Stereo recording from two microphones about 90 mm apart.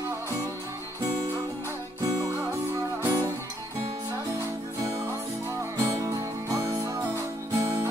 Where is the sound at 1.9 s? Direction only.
45° right (ahead or behind).